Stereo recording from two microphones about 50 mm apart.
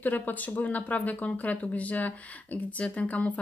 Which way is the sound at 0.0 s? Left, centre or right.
Left.